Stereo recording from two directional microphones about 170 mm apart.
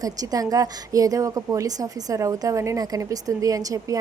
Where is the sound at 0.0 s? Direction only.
20° right (ahead or behind).